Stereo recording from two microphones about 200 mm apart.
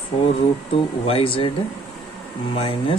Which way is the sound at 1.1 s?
25° left (ahead or behind).